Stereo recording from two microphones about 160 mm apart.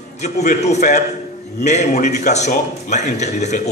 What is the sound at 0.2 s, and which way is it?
A man's voice, 45° left (ahead or behind).